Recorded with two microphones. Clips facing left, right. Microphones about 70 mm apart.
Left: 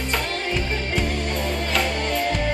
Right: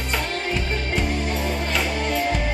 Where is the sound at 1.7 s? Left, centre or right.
Centre.